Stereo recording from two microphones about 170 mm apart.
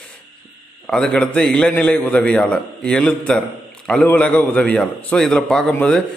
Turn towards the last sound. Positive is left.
turn(degrees=5)  # may be behind; listen again after turning